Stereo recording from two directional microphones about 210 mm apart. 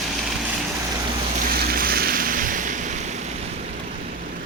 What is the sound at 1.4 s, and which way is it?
Waves, 45° right (ahead or behind).